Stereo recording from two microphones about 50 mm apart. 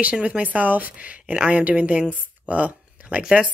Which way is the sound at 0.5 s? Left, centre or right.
Right.